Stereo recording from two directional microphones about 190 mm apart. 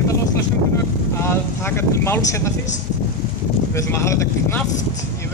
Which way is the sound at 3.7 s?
15° left (ahead or behind).